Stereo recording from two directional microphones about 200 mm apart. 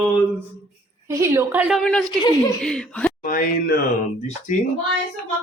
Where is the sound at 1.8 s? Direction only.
5° left (ahead or behind).